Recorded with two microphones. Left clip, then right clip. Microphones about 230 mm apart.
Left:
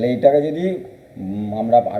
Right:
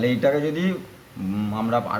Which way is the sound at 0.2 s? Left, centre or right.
Right.